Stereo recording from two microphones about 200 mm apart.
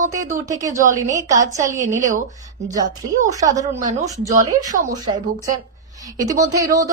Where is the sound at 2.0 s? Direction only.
40° right (ahead or behind).